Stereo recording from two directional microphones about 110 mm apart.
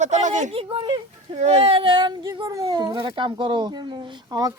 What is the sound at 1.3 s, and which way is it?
Speech, 90° right.